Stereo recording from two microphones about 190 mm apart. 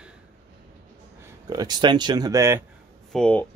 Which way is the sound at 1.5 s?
20° right (ahead or behind).